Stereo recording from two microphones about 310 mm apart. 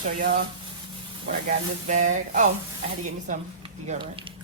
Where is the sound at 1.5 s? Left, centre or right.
Right.